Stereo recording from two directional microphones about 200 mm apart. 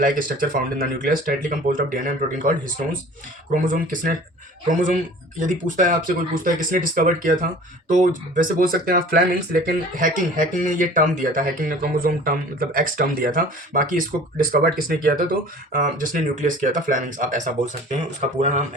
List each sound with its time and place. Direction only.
0.0 s speech: 45° right (ahead or behind)